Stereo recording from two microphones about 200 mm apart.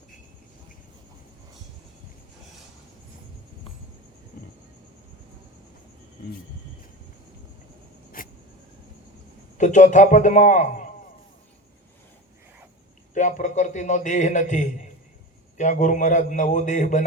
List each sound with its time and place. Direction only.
4.3 s vehicle: 40° left (ahead or behind)
8.2 s a sound: 45° left (ahead or behind)
9.6 s a man's voice: 35° left (ahead or behind)
13.1 s a man's voice: 40° left (ahead or behind)